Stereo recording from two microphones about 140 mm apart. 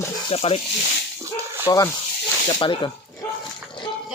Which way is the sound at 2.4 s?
35° left (ahead or behind).